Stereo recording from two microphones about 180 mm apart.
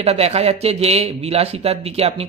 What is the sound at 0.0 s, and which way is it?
Speech, 35° right (ahead or behind).